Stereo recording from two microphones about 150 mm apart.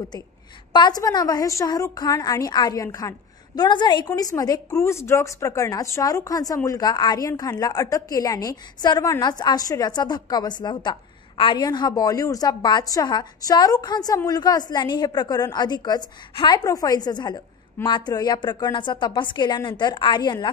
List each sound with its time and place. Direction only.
0.7 s a woman's voice: 25° left (ahead or behind)